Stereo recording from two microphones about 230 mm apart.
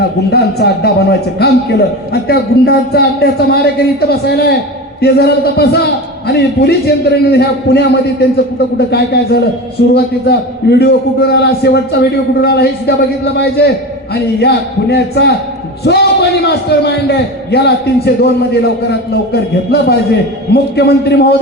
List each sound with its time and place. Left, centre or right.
0.3 s a man's voice: left